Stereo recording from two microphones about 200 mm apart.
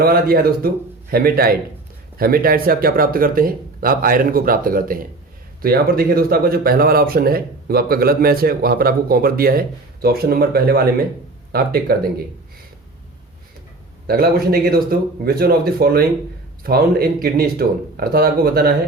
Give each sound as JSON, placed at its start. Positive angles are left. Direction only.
{"t": 0.0, "sound": "speech", "side_deg": -50}
{"t": 14.1, "sound": "speech", "side_deg": -50}